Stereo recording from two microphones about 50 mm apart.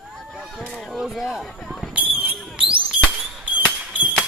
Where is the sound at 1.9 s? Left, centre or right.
Right.